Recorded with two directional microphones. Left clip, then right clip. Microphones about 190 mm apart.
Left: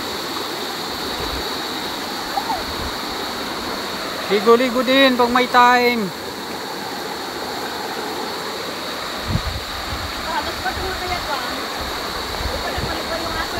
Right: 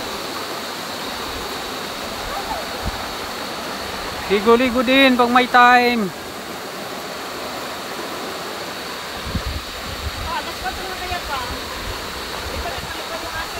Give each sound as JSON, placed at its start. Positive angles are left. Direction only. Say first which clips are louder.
{"t": 4.3, "sound": "speech", "louder": "left 1 dB", "side_deg": -20}